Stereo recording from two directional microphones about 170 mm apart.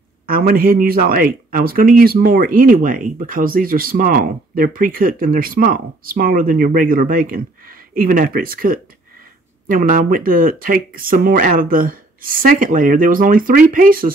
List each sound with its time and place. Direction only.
0.3 s speech: 60° right (ahead or behind)